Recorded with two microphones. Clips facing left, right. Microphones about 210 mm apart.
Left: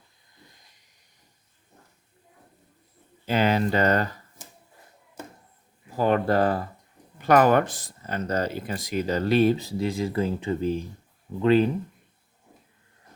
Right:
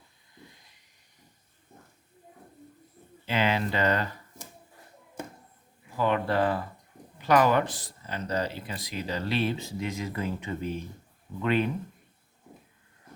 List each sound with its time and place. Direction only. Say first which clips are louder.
3.2 s speech: left 5 dB; 40° left (ahead or behind)
6.0 s speech: left 4 dB; 45° left (ahead or behind)